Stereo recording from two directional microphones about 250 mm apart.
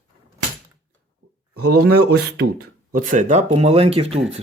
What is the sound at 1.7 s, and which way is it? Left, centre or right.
Speech, right.